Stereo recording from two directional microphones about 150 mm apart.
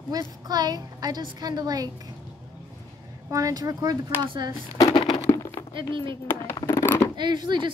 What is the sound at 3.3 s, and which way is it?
A woman's voice, 20° right (ahead or behind).